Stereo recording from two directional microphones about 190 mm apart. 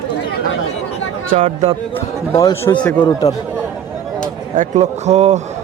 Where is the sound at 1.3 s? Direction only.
35° right (ahead or behind).